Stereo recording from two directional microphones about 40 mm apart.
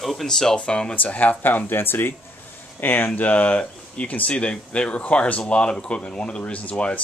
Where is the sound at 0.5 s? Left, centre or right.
Left.